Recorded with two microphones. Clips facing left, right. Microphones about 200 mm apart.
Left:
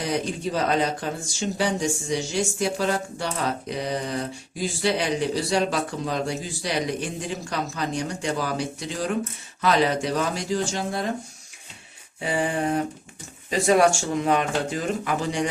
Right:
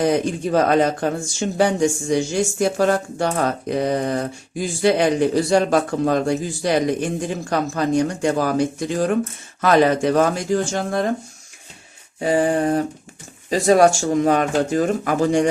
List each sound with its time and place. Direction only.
0.0 s speech: 50° right (ahead or behind)
12.2 s speech: 40° right (ahead or behind)